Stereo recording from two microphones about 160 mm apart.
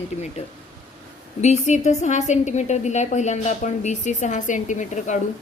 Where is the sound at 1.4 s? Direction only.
45° left (ahead or behind).